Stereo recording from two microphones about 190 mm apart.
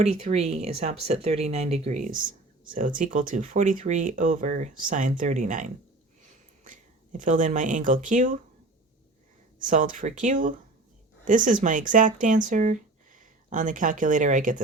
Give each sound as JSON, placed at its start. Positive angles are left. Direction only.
{"t": 0.0, "sound": "speech", "side_deg": -35}
{"t": 6.2, "sound": "a sound", "side_deg": -40}
{"t": 9.6, "sound": "speech", "side_deg": -45}